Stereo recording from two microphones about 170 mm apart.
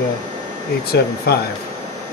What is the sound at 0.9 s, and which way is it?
Speech, 70° left (ahead or behind).